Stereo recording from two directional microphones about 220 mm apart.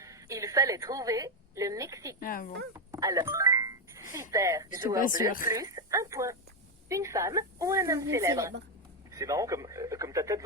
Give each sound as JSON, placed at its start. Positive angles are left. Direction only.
{"t": 0.0, "sound": "a woman's voice", "side_deg": -15}
{"t": 2.2, "sound": "speech", "side_deg": 40}
{"t": 2.7, "sound": "music", "side_deg": -15}
{"t": 4.1, "sound": "a woman's voice", "side_deg": -15}